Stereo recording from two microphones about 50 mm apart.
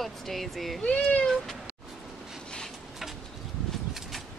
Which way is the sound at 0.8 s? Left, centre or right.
Left.